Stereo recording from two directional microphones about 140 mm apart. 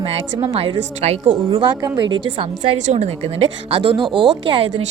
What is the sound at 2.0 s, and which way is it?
Speech, 35° right (ahead or behind).